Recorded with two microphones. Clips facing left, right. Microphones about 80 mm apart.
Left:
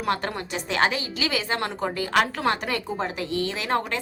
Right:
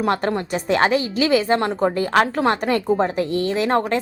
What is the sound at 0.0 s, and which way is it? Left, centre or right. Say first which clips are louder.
A woman's voice: right 6 dB; right.